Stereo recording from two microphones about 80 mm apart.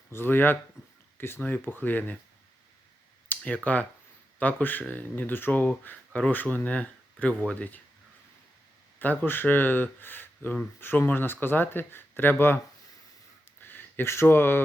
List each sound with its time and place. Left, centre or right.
0.1 s speech: left
1.4 s speech: centre
1.6 s speech: left
3.2 s speech: centre
9.0 s speech: left
13.6 s a sound: left